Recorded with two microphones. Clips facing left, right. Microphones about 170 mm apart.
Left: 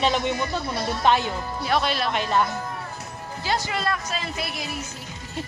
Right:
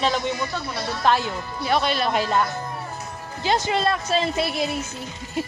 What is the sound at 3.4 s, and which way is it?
A woman's voice, 20° right (ahead or behind).